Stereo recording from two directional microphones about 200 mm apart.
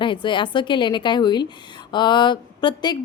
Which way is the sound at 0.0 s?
25° left (ahead or behind).